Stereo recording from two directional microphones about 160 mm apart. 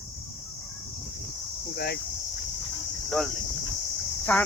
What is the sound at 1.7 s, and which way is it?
Speech, 80° left.